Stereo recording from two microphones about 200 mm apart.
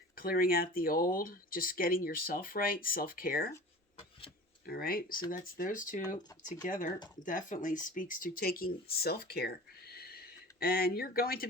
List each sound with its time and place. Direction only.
0.2 s speech: 45° left (ahead or behind)
4.6 s speech: 50° left (ahead or behind)